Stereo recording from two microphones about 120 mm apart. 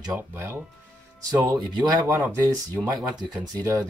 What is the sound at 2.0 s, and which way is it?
Speech, 20° right (ahead or behind).